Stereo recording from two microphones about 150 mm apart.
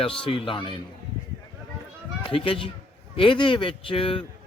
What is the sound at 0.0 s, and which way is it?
Speech, 35° left (ahead or behind).